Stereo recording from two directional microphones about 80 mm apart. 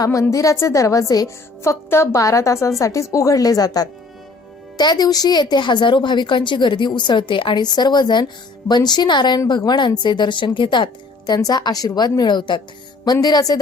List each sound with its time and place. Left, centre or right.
0.0 s a woman's voice: left
11.3 s a woman's voice: left
13.2 s a woman's voice: left